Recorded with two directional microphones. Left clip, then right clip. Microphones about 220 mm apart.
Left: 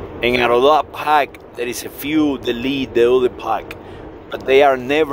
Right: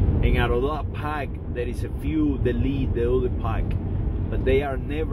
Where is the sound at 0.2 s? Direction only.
50° left (ahead or behind).